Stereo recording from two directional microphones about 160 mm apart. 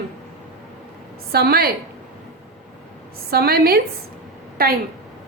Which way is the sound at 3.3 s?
75° right (ahead or behind).